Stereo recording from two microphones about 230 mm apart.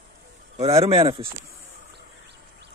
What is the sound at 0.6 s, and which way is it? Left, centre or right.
Speech, right.